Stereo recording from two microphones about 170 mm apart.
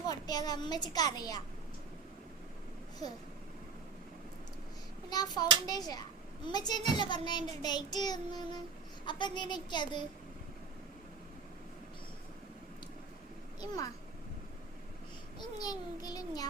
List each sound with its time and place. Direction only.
0.1 s a child's voice: 20° left (ahead or behind)
5.0 s hands: 25° left (ahead or behind)
5.6 s a child's voice: 25° left (ahead or behind)
13.6 s a child's voice: 20° left (ahead or behind)
15.4 s a child's voice: 25° left (ahead or behind)